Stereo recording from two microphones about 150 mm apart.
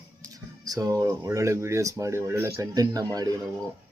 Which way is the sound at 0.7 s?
25° right (ahead or behind).